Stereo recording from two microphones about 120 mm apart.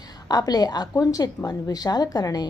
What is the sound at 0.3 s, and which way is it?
A woman's voice, 35° left (ahead or behind).